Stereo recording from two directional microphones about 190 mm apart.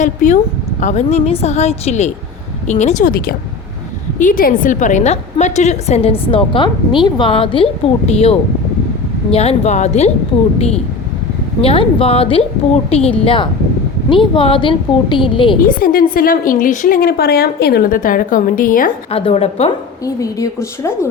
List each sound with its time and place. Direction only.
0.0 s a woman's voice: 40° left (ahead or behind)
11.6 s a woman's voice: 30° left (ahead or behind)
15.8 s a woman's voice: 50° left (ahead or behind)
19.1 s a woman's voice: 30° left (ahead or behind)
20.1 s a woman's voice: 15° left (ahead or behind)